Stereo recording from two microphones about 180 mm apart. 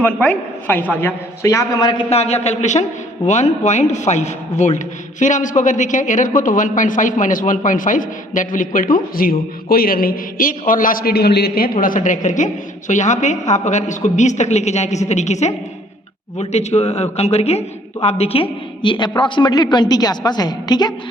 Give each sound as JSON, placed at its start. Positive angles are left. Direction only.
{"t": 0.0, "sound": "a woman's voice", "side_deg": 10}
{"t": 2.0, "sound": "a woman's voice", "side_deg": 35}